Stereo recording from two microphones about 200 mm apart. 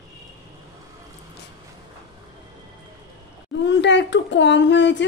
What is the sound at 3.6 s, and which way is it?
Speech, 60° left (ahead or behind).